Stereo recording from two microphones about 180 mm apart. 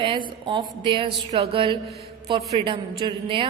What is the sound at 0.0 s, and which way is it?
A woman's voice, 25° right (ahead or behind).